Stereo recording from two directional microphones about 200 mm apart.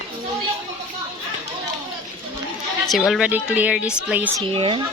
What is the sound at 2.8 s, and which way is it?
A woman's voice, centre (ahead or behind).